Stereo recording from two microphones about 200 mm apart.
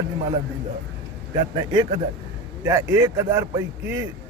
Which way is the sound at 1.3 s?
20° right (ahead or behind).